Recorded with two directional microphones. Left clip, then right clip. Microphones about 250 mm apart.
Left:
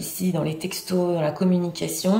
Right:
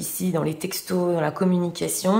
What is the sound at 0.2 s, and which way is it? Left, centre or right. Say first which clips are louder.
Speech: right 1 dB; centre.